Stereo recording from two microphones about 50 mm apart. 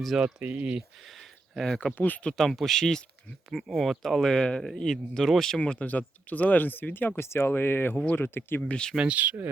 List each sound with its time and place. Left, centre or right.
0.4 s speech: right
1.5 s speech: centre
2.0 s speech: left
2.4 s speech: centre
5.5 s speech: left
7.2 s speech: left
8.6 s speech: centre
9.0 s speech: right